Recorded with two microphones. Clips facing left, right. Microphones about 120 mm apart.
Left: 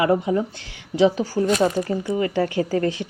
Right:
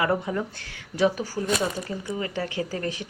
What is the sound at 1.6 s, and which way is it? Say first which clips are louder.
Speech: left 8 dB; 40° left (ahead or behind).